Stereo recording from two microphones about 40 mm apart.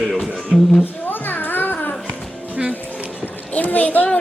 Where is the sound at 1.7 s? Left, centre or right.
Left.